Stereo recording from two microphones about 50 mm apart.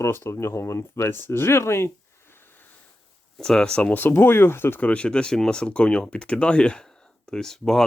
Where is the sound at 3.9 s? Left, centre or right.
Left.